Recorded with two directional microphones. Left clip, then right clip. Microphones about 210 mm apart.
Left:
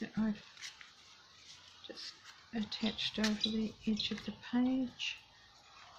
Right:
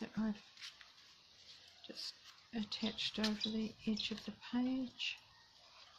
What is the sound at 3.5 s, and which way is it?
Speech, 20° right (ahead or behind).